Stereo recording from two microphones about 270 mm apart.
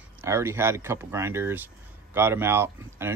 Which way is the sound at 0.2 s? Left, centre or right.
Centre.